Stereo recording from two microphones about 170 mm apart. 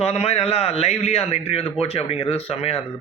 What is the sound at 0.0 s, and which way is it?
Speech, 35° left (ahead or behind).